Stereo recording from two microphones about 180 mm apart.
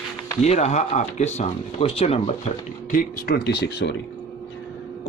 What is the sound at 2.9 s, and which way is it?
Speech, 50° left (ahead or behind).